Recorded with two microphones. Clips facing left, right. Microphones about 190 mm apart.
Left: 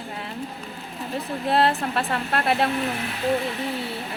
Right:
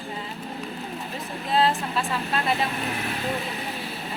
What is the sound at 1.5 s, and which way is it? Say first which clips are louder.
Speech: left 2 dB; 60° left (ahead or behind).